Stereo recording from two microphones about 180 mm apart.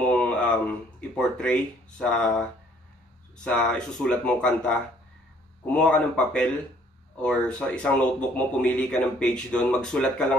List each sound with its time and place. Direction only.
0.0 s a sound: 5° left (ahead or behind)
1.1 s speech: 5° left (ahead or behind)
3.4 s speech: 5° left (ahead or behind)